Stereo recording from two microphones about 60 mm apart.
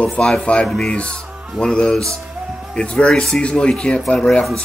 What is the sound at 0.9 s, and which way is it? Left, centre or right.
Speech, centre.